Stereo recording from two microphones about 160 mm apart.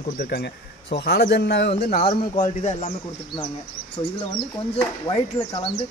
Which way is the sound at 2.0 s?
50° left (ahead or behind).